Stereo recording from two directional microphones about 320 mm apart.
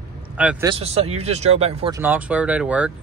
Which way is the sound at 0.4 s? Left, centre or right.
Centre.